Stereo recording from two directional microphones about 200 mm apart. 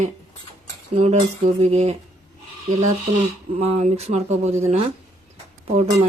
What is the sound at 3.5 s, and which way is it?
Speech, 30° right (ahead or behind).